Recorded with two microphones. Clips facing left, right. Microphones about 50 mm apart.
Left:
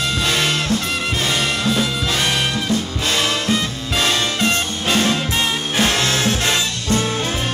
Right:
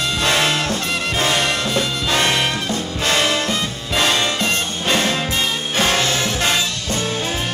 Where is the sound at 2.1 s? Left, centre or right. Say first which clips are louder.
Right 4 dB; right.